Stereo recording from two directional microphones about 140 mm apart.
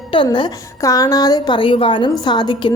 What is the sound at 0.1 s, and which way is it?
A woman's voice, 35° left (ahead or behind).